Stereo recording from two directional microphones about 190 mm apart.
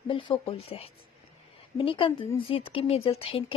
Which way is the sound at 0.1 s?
30° left (ahead or behind).